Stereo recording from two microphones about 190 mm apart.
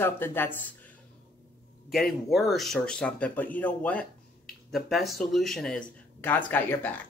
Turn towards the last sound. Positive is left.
turn(degrees=10)  # may be behind; listen again after turning